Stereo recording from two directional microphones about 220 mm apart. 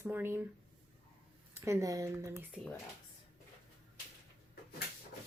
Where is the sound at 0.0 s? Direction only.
10° right (ahead or behind).